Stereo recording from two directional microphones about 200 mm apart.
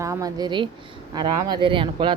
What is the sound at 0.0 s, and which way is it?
A woman's voice, 15° right (ahead or behind).